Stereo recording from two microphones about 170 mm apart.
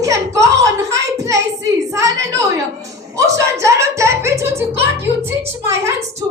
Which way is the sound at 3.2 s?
20° right (ahead or behind).